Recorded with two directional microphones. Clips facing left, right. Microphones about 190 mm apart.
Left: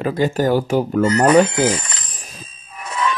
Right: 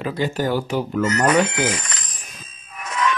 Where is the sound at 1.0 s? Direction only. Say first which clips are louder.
Left 5 dB; 35° left (ahead or behind).